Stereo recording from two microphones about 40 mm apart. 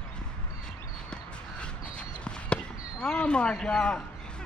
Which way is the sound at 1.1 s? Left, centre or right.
Left.